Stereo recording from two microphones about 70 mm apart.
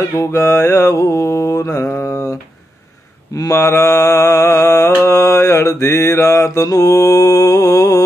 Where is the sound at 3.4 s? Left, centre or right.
Left.